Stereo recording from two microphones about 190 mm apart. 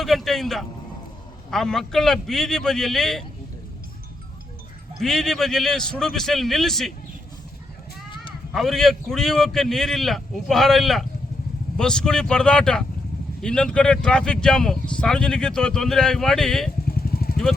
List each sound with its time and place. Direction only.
0.0 s a sound: centre (ahead or behind)
1.5 s speech: centre (ahead or behind)
4.9 s speech: centre (ahead or behind)
8.5 s speech: centre (ahead or behind)
16.9 s vehicle: 55° left (ahead or behind)